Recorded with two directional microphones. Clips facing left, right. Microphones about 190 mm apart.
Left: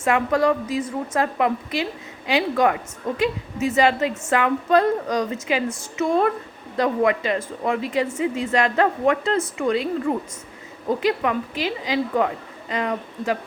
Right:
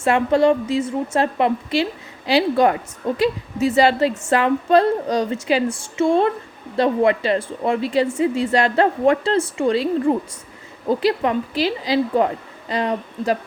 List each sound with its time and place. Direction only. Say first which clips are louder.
0.0 s a woman's voice: right 4 dB; 30° right (ahead or behind)